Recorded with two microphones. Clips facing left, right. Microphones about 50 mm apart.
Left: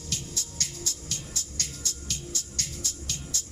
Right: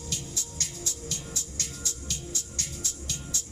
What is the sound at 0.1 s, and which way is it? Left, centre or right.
Music, right.